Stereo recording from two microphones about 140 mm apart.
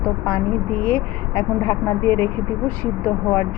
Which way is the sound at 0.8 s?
10° left (ahead or behind).